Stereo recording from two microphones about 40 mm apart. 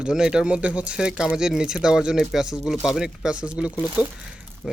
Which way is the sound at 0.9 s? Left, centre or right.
Centre.